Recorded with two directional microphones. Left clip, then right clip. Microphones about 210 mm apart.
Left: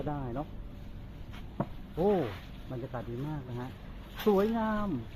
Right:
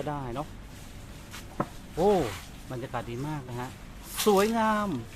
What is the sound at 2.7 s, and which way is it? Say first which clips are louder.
Speech: right 5 dB; 30° right (ahead or behind).